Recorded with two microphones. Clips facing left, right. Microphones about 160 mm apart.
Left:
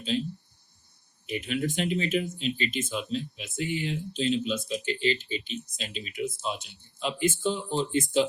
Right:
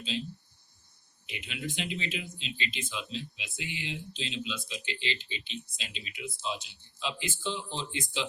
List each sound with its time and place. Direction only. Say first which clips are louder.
1.3 s speech: left 9 dB; 45° left (ahead or behind)